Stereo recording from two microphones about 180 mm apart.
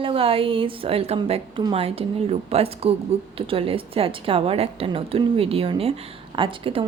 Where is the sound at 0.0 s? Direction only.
30° right (ahead or behind).